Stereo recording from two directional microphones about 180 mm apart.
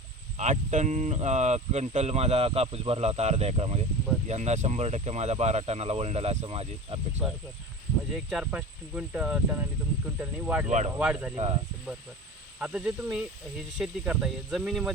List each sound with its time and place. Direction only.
0.3 s speech: 40° right (ahead or behind)
8.1 s speech: centre (ahead or behind)
10.7 s speech: 40° right (ahead or behind)
10.9 s speech: 5° right (ahead or behind)
12.5 s speech: 5° right (ahead or behind)